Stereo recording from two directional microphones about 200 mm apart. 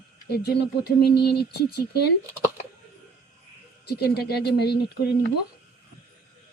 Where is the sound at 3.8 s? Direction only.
55° left (ahead or behind).